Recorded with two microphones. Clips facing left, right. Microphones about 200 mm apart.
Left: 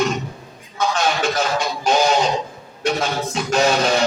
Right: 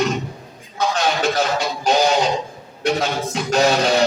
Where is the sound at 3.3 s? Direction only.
35° right (ahead or behind).